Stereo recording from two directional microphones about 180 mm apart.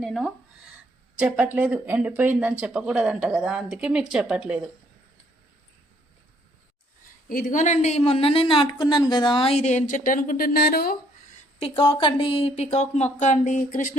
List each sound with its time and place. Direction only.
0.0 s speech: centre (ahead or behind)
7.3 s a woman's voice: 50° left (ahead or behind)
11.7 s a woman's voice: 25° left (ahead or behind); by 13.9 s 45° left (ahead or behind)